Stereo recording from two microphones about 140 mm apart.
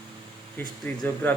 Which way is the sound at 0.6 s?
15° left (ahead or behind).